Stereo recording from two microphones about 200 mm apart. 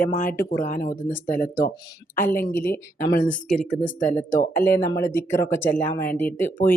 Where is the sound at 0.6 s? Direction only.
40° left (ahead or behind).